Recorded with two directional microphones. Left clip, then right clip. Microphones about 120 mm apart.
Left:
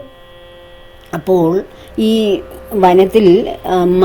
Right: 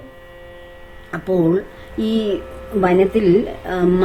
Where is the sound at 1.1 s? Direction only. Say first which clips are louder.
Left 5 dB; 55° left (ahead or behind).